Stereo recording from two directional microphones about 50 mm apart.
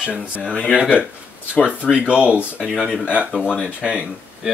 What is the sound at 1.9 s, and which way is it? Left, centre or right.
Speech, right.